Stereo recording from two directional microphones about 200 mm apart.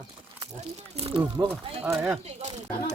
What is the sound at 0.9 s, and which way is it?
Speech, 30° right (ahead or behind).